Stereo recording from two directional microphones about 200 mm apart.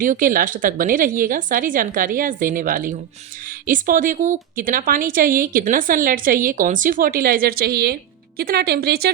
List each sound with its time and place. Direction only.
0.0 s speech: 45° right (ahead or behind)